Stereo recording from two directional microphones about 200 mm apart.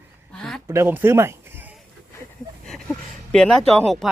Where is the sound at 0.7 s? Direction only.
10° right (ahead or behind).